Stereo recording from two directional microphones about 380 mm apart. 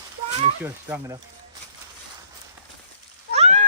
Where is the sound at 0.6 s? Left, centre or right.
Centre.